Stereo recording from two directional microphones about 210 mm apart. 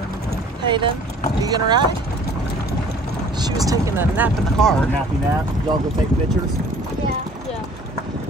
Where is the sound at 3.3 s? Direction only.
20° right (ahead or behind).